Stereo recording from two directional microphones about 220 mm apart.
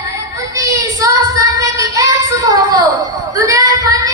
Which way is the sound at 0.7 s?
15° right (ahead or behind).